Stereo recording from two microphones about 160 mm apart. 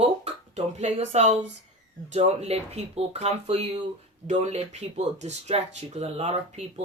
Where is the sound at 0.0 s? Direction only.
40° right (ahead or behind).